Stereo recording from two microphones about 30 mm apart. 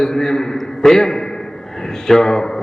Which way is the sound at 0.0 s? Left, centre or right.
Left.